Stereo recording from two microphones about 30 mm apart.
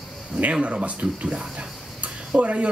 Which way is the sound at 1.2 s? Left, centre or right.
Right.